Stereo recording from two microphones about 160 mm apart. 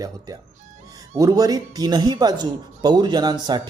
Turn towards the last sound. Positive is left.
turn(degrees=-25)  # may be behind; listen again after turning